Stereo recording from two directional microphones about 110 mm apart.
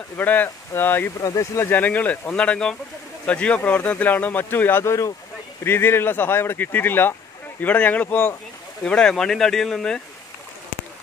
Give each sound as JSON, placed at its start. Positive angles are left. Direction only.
{"t": 0.2, "sound": "speech", "side_deg": 15}
{"t": 1.2, "sound": "speech", "side_deg": 30}
{"t": 1.7, "sound": "speech", "side_deg": 15}
{"t": 8.8, "sound": "speech", "side_deg": 5}